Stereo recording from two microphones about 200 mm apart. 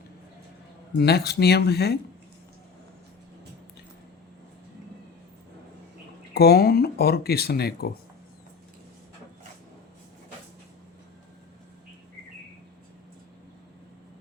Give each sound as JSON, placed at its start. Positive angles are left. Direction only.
{"t": 0.9, "sound": "speech", "side_deg": 55}
{"t": 6.3, "sound": "speech", "side_deg": 50}